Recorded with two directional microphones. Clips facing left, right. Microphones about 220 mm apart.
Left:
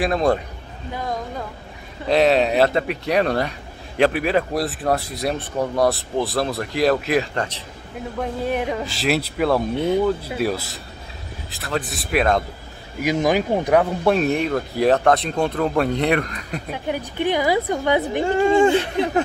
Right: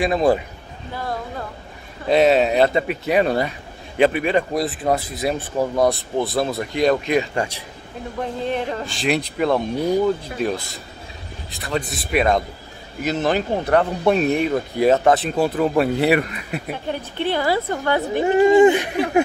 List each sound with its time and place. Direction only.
0.0 s speech: 5° right (ahead or behind)
0.9 s a woman's voice: 15° left (ahead or behind)
2.0 s speech: centre (ahead or behind)
7.3 s speech: 10° right (ahead or behind)
8.2 s speech: 10° left (ahead or behind)
13.0 s a woman's voice: 10° left (ahead or behind)
14.0 s speech: centre (ahead or behind)
16.7 s a woman's voice: 10° left (ahead or behind)
18.2 s speech: 20° right (ahead or behind)